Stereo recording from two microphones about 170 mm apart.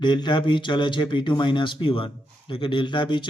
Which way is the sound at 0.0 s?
25° left (ahead or behind).